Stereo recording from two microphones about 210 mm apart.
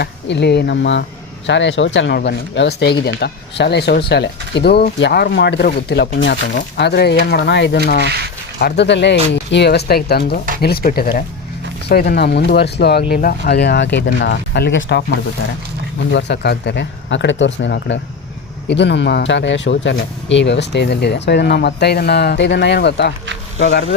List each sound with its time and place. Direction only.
0.0 s speech: 55° left (ahead or behind)
16.1 s speech: 55° left (ahead or behind)